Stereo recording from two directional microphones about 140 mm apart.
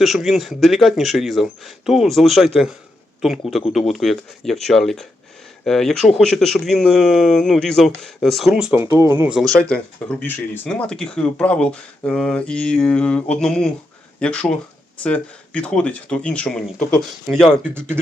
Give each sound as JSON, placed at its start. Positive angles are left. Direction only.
{"t": 0.0, "sound": "speech", "side_deg": 0}
{"t": 8.7, "sound": "speech", "side_deg": -20}
{"t": 9.3, "sound": "speech", "side_deg": 5}